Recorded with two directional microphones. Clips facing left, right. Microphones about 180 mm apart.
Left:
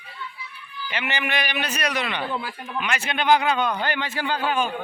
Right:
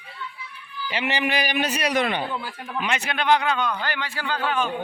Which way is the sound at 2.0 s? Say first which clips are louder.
Right 5 dB; 45° right (ahead or behind).